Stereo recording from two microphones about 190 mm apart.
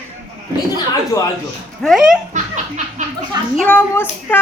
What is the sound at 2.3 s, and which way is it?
Chuckle, 40° right (ahead or behind).